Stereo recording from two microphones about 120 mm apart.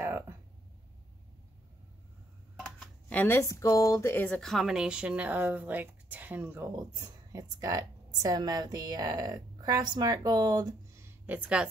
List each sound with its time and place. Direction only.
2.6 s a sound: 10° left (ahead or behind)
3.3 s speech: 25° left (ahead or behind)
4.4 s a woman's voice: centre (ahead or behind); by 6.7 s 15° right (ahead or behind)
6.7 s a woman's voice: 30° right (ahead or behind)
11.2 s a woman's voice: 10° right (ahead or behind)